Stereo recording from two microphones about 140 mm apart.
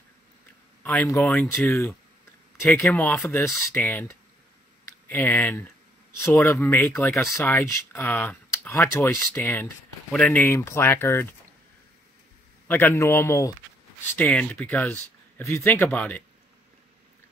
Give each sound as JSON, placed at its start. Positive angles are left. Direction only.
{"t": 0.8, "sound": "speech", "side_deg": 10}
{"t": 1.7, "sound": "a man's voice", "side_deg": 20}
{"t": 2.9, "sound": "a man's voice", "side_deg": 10}
{"t": 10.1, "sound": "speech", "side_deg": 5}
{"t": 10.4, "sound": "speech", "side_deg": 20}
{"t": 12.6, "sound": "a man's voice", "side_deg": 15}